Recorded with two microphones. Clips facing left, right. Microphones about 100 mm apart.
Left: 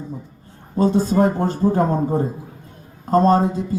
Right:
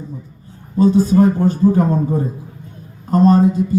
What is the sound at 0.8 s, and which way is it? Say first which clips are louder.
A man's voice: right 4 dB; 40° left (ahead or behind).